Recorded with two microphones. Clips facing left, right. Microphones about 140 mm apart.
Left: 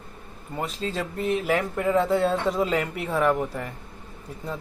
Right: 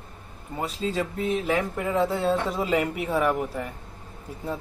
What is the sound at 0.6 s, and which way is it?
Speech, centre (ahead or behind).